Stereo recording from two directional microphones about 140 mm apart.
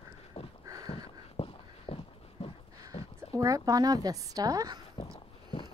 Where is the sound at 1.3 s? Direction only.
45° left (ahead or behind).